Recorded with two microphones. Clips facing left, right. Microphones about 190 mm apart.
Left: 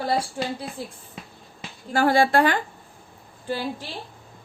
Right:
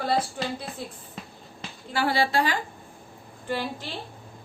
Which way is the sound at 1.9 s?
45° left (ahead or behind).